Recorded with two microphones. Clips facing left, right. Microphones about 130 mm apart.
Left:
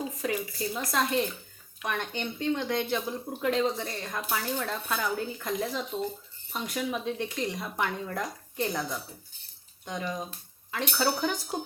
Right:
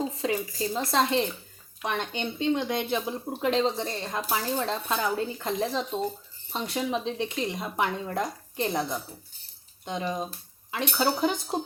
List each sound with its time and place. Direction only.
0.0 s a sound: 25° right (ahead or behind)
0.6 s speech: 30° right (ahead or behind)
10.0 s speech: 25° right (ahead or behind)